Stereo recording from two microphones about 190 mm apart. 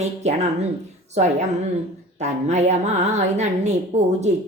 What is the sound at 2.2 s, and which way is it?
Speech, 35° right (ahead or behind).